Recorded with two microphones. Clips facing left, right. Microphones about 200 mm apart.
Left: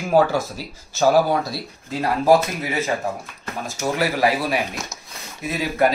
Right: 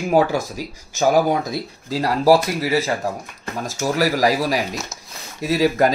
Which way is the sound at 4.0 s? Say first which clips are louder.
Right 3 dB; 40° right (ahead or behind).